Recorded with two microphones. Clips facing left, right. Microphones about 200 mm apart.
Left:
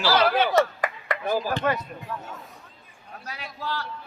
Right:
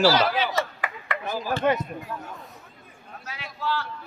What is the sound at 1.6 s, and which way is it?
Speech, 15° right (ahead or behind).